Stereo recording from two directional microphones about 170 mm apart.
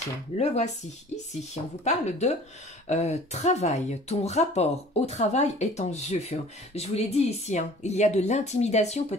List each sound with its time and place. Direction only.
1.1 s speech: 40° left (ahead or behind)